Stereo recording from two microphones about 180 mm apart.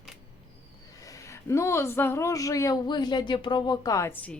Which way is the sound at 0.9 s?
20° left (ahead or behind).